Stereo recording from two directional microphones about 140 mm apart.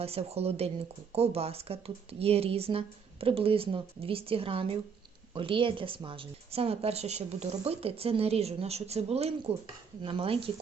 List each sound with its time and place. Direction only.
0.0 s a woman's voice: 45° right (ahead or behind)